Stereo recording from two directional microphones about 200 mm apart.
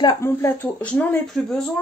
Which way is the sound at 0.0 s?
15° left (ahead or behind).